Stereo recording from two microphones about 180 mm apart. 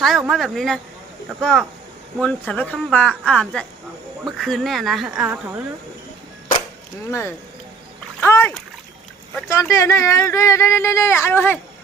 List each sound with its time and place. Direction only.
0.0 s speech: centre (ahead or behind)
7.1 s speech: 15° left (ahead or behind)
8.2 s splash: 10° left (ahead or behind)
9.5 s speech: 15° left (ahead or behind)